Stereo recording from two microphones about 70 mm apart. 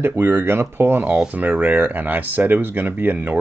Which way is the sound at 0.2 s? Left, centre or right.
Right.